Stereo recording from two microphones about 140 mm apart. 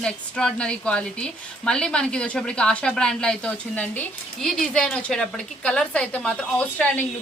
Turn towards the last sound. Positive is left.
turn(degrees=10)  # may be behind; listen again after turning